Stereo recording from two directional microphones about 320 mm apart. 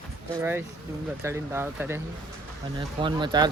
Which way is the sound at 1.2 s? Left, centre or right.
Centre.